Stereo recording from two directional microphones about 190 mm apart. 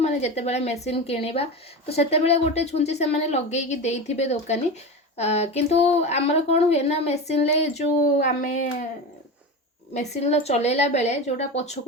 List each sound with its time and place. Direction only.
0.0 s speech: 35° left (ahead or behind)
9.9 s speech: 35° left (ahead or behind)